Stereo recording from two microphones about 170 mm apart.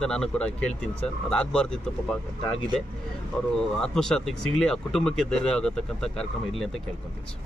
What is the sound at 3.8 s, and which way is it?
Speech, 5° left (ahead or behind).